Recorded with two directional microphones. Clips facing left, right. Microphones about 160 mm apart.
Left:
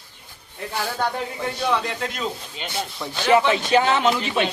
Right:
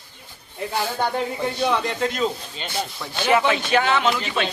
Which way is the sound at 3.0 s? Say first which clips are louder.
Left 2 dB; 25° left (ahead or behind).